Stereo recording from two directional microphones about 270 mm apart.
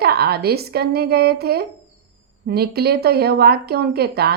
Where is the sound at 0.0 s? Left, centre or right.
Right.